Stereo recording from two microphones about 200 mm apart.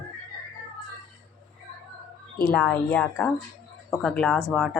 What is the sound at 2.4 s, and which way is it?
A woman's voice, 5° left (ahead or behind).